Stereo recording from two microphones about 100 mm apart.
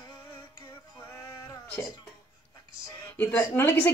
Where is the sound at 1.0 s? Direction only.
25° left (ahead or behind).